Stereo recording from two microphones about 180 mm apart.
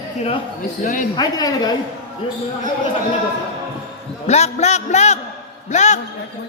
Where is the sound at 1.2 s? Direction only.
20° left (ahead or behind).